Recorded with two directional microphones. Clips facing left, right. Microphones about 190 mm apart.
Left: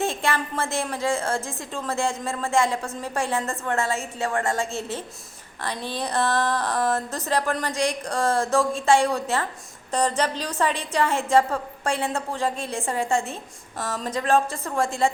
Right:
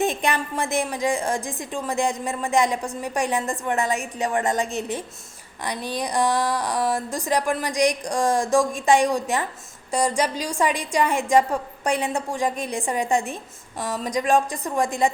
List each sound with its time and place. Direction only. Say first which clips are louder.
0.0 s a woman's voice: right 2 dB; 20° right (ahead or behind)